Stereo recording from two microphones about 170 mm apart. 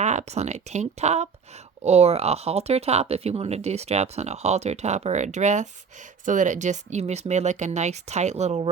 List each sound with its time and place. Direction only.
0.0 s speech: 45° right (ahead or behind)